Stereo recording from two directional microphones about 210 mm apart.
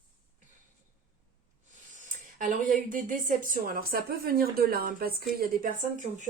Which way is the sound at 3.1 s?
40° right (ahead or behind).